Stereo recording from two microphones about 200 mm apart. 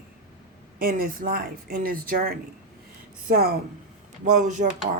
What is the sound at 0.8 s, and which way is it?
Speech, 50° right (ahead or behind).